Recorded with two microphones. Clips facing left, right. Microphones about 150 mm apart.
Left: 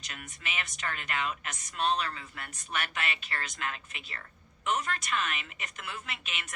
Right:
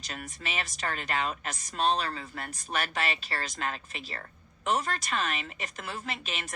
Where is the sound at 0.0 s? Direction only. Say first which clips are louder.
Right 4 dB; 35° right (ahead or behind).